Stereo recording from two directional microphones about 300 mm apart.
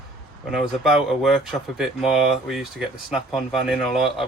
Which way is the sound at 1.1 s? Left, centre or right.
Centre.